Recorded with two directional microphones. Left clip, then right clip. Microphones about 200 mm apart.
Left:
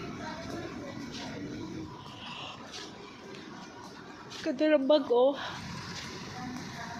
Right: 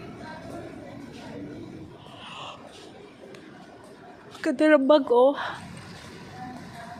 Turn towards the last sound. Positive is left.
turn(degrees=-35)  # may be behind; listen again after turning